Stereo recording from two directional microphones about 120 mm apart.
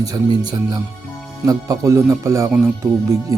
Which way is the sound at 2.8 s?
10° left (ahead or behind).